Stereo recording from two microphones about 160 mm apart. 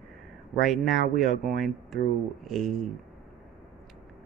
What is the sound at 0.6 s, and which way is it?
Speech, centre (ahead or behind).